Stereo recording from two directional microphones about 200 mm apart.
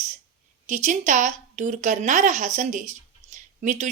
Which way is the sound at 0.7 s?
35° right (ahead or behind).